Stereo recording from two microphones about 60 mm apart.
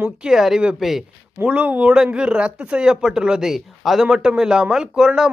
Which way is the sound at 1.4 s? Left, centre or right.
Right.